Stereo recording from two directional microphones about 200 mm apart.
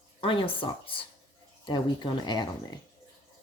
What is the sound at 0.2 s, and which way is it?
Speech, 25° left (ahead or behind).